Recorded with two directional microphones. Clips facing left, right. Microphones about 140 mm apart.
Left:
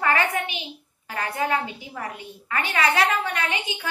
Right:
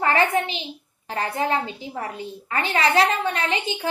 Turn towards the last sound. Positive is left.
turn(degrees=-30)  # may be behind; listen again after turning